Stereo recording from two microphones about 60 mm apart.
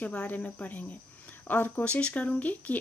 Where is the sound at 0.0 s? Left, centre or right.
Centre.